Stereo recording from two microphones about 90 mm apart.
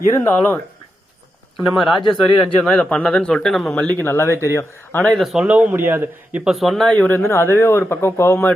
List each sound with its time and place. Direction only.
0.1 s speech: 25° left (ahead or behind)
1.5 s speech: centre (ahead or behind)
3.8 s speech: 20° left (ahead or behind)
5.1 s speech: 5° right (ahead or behind)
5.5 s a man's voice: 15° right (ahead or behind)
6.4 s speech: centre (ahead or behind)
6.8 s speech: 15° left (ahead or behind)
7.3 s speech: 25° left (ahead or behind)